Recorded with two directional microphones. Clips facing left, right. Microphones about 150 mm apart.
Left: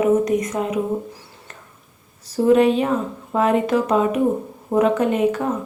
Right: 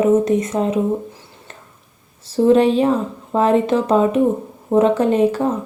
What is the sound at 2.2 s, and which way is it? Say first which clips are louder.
A woman's voice: right 2 dB; 30° right (ahead or behind).